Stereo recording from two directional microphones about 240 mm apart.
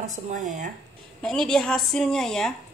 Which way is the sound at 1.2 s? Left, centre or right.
Centre.